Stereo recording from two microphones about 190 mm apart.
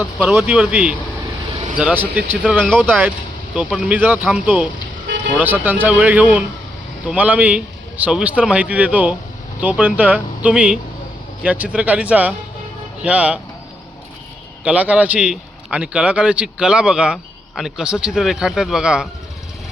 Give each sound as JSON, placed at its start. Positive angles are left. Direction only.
{"t": 0.0, "sound": "a man's voice", "side_deg": 0}
{"t": 14.6, "sound": "speech", "side_deg": -5}